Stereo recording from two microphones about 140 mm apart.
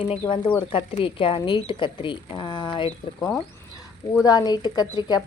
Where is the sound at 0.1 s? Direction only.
35° left (ahead or behind).